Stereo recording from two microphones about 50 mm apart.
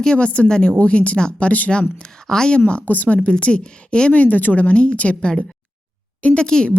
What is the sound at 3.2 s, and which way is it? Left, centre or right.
Speech, left.